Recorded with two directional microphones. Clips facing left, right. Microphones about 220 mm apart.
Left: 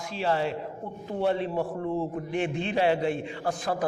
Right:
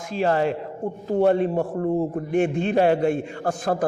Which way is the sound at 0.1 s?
50° right (ahead or behind).